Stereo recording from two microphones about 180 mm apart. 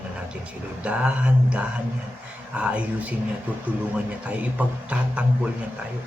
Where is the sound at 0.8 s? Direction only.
5° right (ahead or behind).